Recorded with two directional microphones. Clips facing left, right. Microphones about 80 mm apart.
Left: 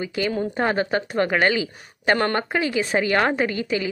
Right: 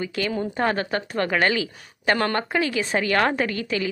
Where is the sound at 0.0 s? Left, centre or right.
Centre.